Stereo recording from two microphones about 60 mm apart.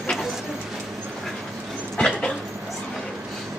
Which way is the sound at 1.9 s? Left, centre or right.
Centre.